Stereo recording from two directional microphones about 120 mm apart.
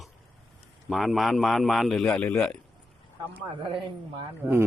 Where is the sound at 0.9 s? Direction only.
Centre (ahead or behind).